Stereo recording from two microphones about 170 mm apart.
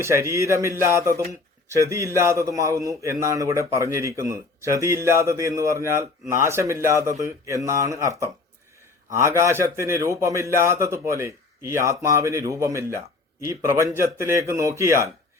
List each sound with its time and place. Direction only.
0.0 s a man's voice: 15° right (ahead or behind)